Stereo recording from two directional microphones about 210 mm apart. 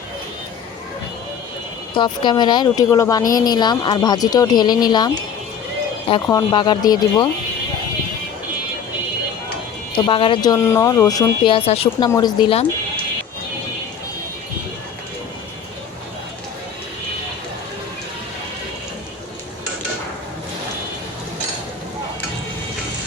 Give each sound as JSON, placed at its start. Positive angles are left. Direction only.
{"t": 1.9, "sound": "speech", "side_deg": 20}
{"t": 6.3, "sound": "speech", "side_deg": 20}
{"t": 9.9, "sound": "speech", "side_deg": 25}